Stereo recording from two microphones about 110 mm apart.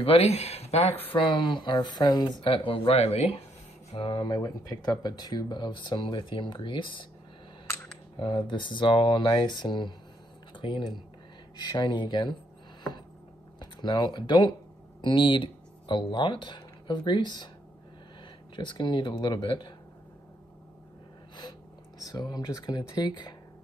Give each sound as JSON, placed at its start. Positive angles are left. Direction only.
{"t": 0.0, "sound": "speech", "side_deg": 65}
{"t": 1.0, "sound": "speech", "side_deg": 50}
{"t": 2.4, "sound": "speech", "side_deg": 55}
{"t": 4.1, "sound": "speech", "side_deg": 40}
{"t": 8.2, "sound": "speech", "side_deg": 45}
{"t": 13.6, "sound": "speech", "side_deg": 40}
{"t": 18.6, "sound": "speech", "side_deg": 45}
{"t": 22.1, "sound": "speech", "side_deg": 40}